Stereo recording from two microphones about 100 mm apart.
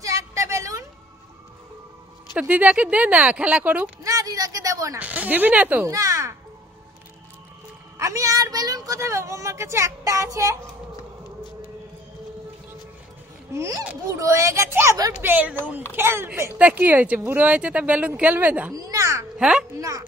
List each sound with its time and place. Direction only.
0.0 s a sound: 30° right (ahead or behind)
2.3 s speech: 15° right (ahead or behind)
4.0 s a sound: 35° right (ahead or behind)
4.9 s speech: 15° right (ahead or behind)
5.9 s a sound: 35° right (ahead or behind)
8.0 s speech: 30° right (ahead or behind)
13.5 s speech: 30° right (ahead or behind)
18.7 s speech: 35° right (ahead or behind)
19.3 s speech: 10° right (ahead or behind)
19.8 s speech: 35° right (ahead or behind)